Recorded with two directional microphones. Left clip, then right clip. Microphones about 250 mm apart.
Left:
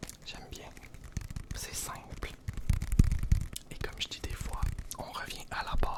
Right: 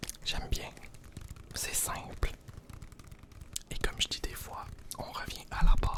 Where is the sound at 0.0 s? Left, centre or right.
Right.